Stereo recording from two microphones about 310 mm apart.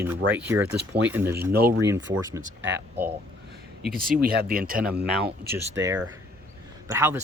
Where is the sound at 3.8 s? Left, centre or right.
Right.